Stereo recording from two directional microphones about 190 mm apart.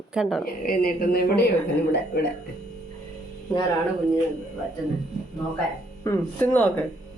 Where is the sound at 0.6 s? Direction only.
50° left (ahead or behind).